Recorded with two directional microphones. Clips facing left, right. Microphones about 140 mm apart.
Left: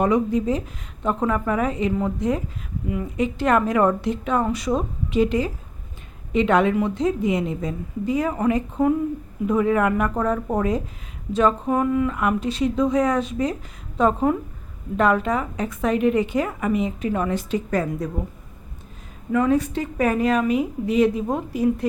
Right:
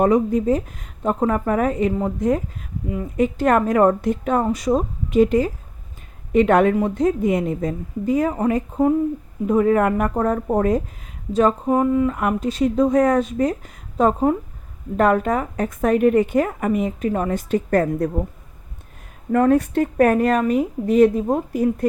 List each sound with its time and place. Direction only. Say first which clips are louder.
0.0 s a woman's voice: right 3 dB; 45° right (ahead or behind)
1.9 s speech: right 1 dB; 30° right (ahead or behind)
2.1 s a woman's voice: right 3 dB; 45° right (ahead or behind)
11.7 s a woman's voice: right 3 dB; 30° right (ahead or behind); by 18.1 s 55° right (ahead or behind)
19.3 s a woman's voice: right 3 dB; 55° right (ahead or behind)